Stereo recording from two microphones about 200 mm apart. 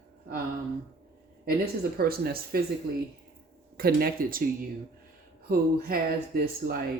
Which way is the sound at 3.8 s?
50° right (ahead or behind).